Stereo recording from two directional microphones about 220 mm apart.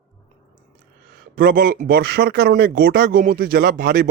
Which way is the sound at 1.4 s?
40° right (ahead or behind).